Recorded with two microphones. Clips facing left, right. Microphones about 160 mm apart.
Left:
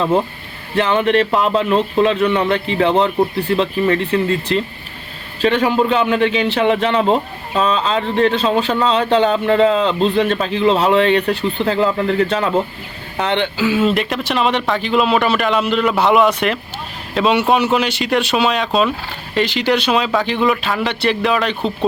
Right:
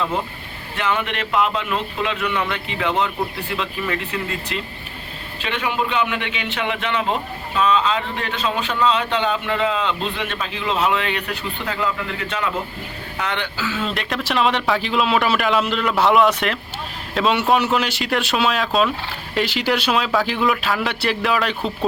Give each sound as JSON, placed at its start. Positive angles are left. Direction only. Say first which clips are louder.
{"t": 0.8, "sound": "a man's voice", "louder": "left 9 dB", "side_deg": 30}
{"t": 13.8, "sound": "speech", "louder": "left 7 dB", "side_deg": 0}